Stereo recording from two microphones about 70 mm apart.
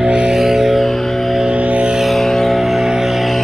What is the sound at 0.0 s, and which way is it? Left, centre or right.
Music, centre.